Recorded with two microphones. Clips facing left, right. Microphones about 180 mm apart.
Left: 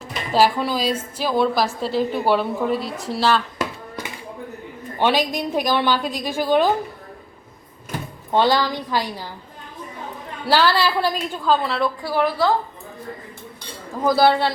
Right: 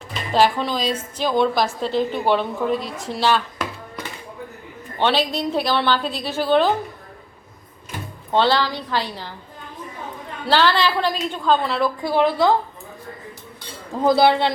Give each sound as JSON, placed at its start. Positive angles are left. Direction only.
{"t": 0.3, "sound": "a woman's voice", "side_deg": 10}
{"t": 4.9, "sound": "a woman's voice", "side_deg": 10}
{"t": 8.3, "sound": "a woman's voice", "side_deg": 10}
{"t": 10.4, "sound": "a woman's voice", "side_deg": 10}
{"t": 12.0, "sound": "a man's voice", "side_deg": -20}
{"t": 14.0, "sound": "a man's voice", "side_deg": -20}